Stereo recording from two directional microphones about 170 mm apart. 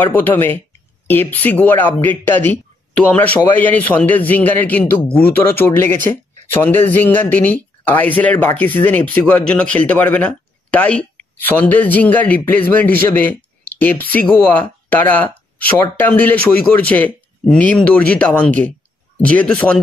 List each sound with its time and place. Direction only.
0.0 s speech: 10° left (ahead or behind)